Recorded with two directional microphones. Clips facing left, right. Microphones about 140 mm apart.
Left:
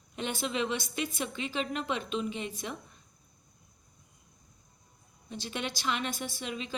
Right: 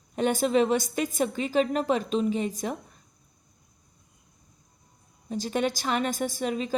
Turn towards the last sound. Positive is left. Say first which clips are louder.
# right 9 dB
turn(degrees=-40)  # may be behind; listen again after turning